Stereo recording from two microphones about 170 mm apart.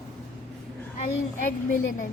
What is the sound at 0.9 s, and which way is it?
A child's voice, 45° left (ahead or behind).